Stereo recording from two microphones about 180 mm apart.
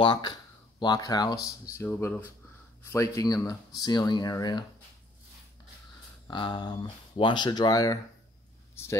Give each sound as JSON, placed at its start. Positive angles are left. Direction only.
{"t": 0.0, "sound": "speech", "side_deg": 25}
{"t": 6.2, "sound": "speech", "side_deg": 25}